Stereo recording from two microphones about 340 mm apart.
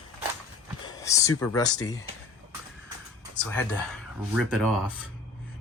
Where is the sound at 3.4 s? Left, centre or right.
Centre.